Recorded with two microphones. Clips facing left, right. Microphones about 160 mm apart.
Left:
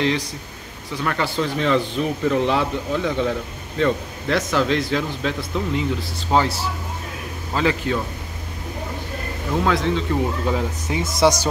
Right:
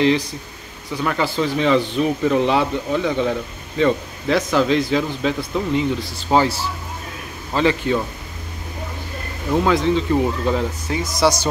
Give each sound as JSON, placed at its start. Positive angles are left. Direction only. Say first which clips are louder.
{"t": 1.0, "sound": "speech", "louder": "right 2 dB", "side_deg": -5}
{"t": 9.7, "sound": "speech", "louder": "right 3 dB", "side_deg": 0}
{"t": 11.0, "sound": "speech", "louder": "left 1 dB", "side_deg": 25}